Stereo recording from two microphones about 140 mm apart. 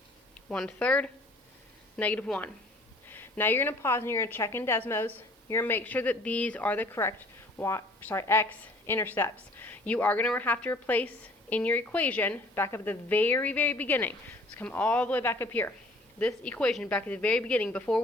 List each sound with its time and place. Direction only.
0.4 s a woman's voice: 5° left (ahead or behind)